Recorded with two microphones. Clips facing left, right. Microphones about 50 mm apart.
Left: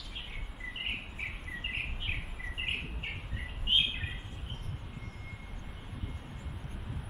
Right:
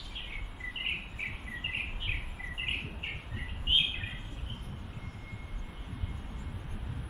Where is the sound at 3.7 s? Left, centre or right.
Centre.